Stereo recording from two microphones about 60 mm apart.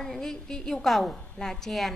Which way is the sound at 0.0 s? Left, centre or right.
Centre.